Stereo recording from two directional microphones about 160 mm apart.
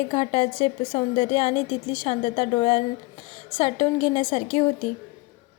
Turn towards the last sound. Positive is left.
turn(degrees=35)  # may be behind; listen again after turning